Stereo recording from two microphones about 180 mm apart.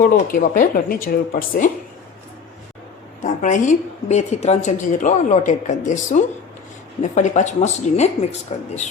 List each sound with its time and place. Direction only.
0.3 s a woman's voice: 50° left (ahead or behind)
3.2 s a woman's voice: 45° left (ahead or behind)